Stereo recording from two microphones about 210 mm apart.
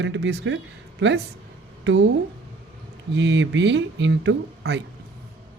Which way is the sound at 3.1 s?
55° right (ahead or behind).